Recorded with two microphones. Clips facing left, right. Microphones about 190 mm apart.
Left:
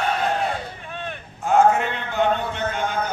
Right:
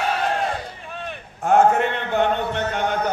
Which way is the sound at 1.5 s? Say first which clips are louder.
Right 1 dB; 60° right (ahead or behind).